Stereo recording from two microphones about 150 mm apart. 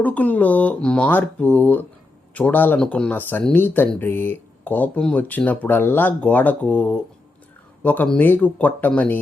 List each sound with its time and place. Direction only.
0.0 s speech: 10° left (ahead or behind)